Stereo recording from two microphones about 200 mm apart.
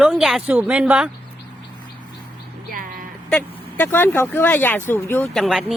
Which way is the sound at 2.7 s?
45° right (ahead or behind).